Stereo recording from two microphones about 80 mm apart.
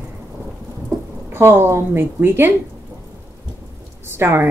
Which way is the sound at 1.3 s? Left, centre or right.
Right.